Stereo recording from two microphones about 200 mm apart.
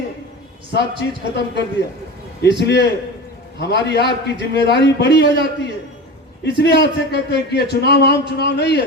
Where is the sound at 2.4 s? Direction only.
55° left (ahead or behind).